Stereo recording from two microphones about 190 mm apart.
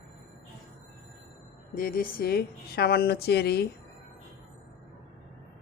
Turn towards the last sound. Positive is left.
turn(degrees=55)  # may be behind; listen again after turning